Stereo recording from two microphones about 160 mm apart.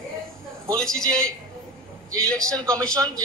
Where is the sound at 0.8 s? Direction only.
5° left (ahead or behind).